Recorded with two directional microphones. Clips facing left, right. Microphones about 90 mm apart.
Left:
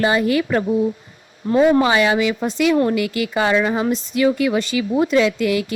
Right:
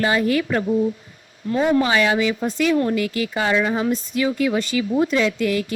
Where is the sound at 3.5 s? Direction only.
50° left (ahead or behind).